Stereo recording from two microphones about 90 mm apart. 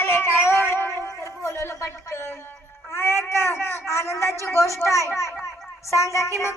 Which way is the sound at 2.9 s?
30° left (ahead or behind).